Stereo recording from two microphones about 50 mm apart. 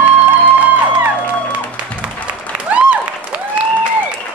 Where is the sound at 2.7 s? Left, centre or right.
Right.